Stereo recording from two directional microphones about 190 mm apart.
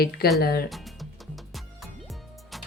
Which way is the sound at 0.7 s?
Centre (ahead or behind).